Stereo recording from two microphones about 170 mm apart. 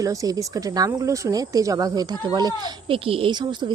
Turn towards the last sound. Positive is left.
turn(degrees=-30)  # may be behind; listen again after turning